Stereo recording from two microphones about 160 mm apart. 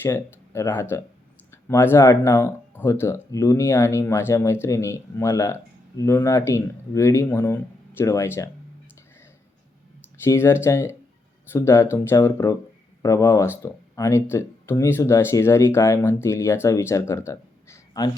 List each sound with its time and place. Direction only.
0.0 s speech: 15° left (ahead or behind)
10.2 s speech: 15° left (ahead or behind)